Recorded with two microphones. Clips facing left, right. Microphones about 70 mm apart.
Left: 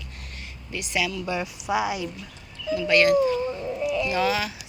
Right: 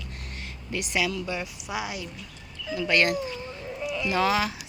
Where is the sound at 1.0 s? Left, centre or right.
Right.